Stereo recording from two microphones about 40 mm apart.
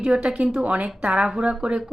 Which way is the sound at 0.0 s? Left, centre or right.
Right.